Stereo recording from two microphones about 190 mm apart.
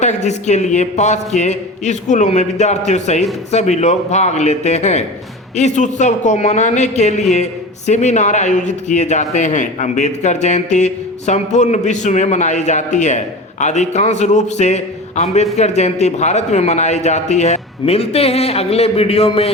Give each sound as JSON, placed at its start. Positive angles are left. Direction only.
{"t": 0.0, "sound": "speech", "side_deg": 35}